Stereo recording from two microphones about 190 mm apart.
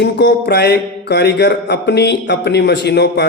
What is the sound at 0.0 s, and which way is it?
Mantra, 65° left (ahead or behind).